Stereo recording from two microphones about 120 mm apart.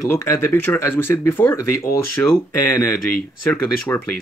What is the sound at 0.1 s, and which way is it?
Speech, 20° left (ahead or behind).